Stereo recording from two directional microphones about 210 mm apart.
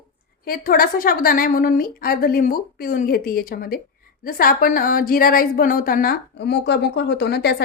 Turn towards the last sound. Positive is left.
turn(degrees=50)  # may be behind; listen again after turning